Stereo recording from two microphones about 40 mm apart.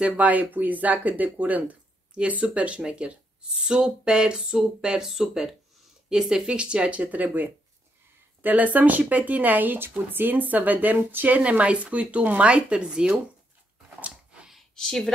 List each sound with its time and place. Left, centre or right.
0.2 s speech: right
7.0 s speech: right
11.2 s speech: right
13.8 s a sound: right
14.8 s speech: centre